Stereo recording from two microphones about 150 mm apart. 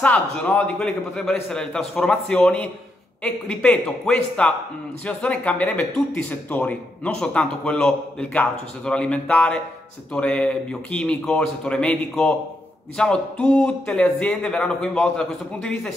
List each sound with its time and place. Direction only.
0.0 s a man's voice: 10° left (ahead or behind)